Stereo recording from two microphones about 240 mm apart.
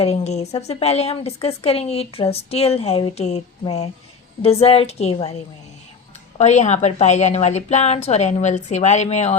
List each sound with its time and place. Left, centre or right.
0.0 s a woman's voice: left